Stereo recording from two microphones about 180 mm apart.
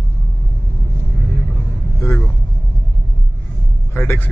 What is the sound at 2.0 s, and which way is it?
Speech, 10° left (ahead or behind).